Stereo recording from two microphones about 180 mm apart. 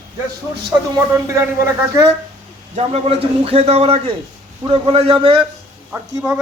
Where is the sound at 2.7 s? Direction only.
35° right (ahead or behind).